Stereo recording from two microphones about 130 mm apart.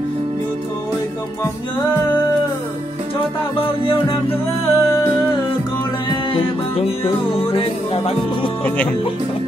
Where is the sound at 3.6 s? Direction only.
40° left (ahead or behind).